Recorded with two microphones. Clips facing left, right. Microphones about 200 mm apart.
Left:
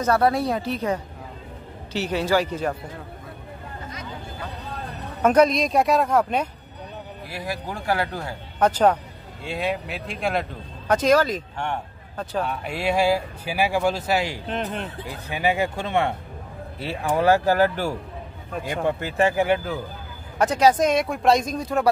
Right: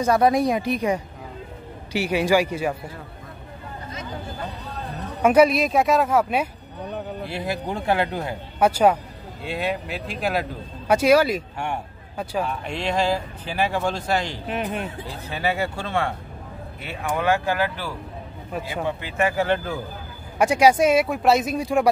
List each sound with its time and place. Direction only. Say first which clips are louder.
0.0 s speech: right 2 dB; 15° right (ahead or behind)
5.2 s speech: right 1 dB; 10° right (ahead or behind)
7.2 s speech: right 1 dB; 25° right (ahead or behind)
8.5 s speech: right 1 dB; 10° right (ahead or behind)
12.4 s speech: left 1 dB; 5° left (ahead or behind)
14.5 s speech: right 1 dB; 10° right (ahead or behind)
15.0 s speech: left 4 dB; 15° left (ahead or behind)
16.8 s speech: left 3 dB; 35° left (ahead or behind)
19.3 s speech: left 1 dB; 10° left (ahead or behind)
20.3 s speech: right 1 dB; 10° right (ahead or behind)